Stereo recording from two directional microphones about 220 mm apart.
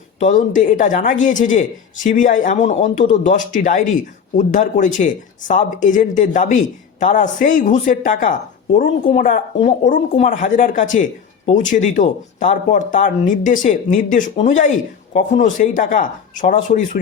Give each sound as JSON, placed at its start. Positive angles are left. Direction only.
{"t": 0.2, "sound": "speech", "side_deg": 35}